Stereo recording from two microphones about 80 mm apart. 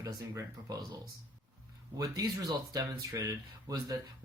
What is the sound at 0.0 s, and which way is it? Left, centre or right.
Speech, right.